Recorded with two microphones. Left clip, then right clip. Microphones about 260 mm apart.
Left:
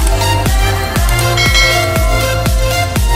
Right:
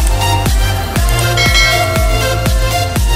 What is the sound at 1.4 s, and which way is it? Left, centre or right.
Music, centre.